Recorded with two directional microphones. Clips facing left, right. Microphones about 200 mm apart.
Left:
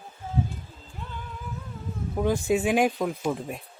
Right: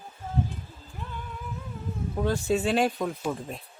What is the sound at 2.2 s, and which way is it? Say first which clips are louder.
Speech: left 2 dB; 15° left (ahead or behind).